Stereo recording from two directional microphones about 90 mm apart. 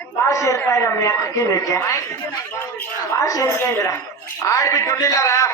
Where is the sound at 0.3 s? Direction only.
35° left (ahead or behind).